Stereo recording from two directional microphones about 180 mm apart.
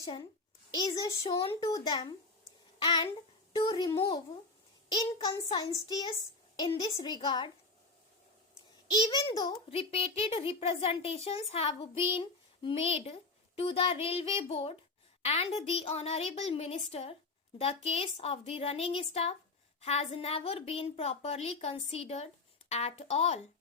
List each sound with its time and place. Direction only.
0.7 s a woman's voice: 20° left (ahead or behind)
1.2 s a woman's voice: 30° left (ahead or behind)
8.9 s a child's voice: 20° left (ahead or behind)